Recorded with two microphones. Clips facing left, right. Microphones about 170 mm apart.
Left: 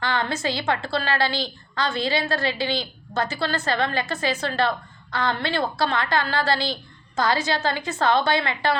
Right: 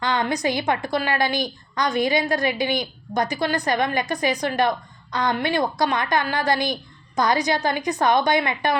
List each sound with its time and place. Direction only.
0.0 s a woman's voice: 15° right (ahead or behind)